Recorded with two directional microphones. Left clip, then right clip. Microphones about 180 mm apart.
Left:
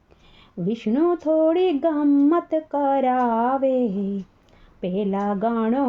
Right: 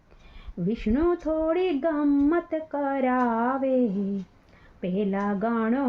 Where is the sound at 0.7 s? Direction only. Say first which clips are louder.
Left 3 dB; 40° left (ahead or behind).